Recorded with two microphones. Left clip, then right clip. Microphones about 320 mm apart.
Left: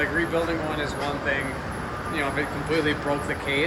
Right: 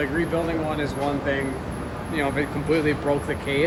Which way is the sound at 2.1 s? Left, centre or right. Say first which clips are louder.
Right 2 dB; right.